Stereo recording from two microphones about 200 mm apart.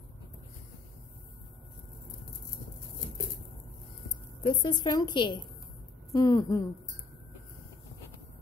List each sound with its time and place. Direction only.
4.4 s a woman's voice: 25° left (ahead or behind)